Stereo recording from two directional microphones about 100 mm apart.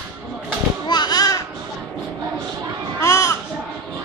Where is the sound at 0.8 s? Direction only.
45° left (ahead or behind).